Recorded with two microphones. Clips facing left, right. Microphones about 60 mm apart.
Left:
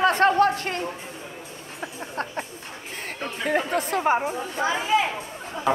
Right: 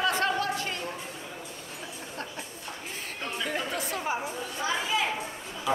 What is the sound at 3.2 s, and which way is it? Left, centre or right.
A man's voice, left.